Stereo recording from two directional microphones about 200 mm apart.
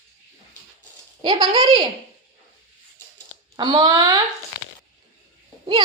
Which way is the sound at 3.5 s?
20° right (ahead or behind).